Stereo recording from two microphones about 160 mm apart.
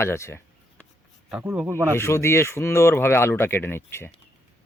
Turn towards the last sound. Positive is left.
turn(degrees=15)  # may be behind; listen again after turning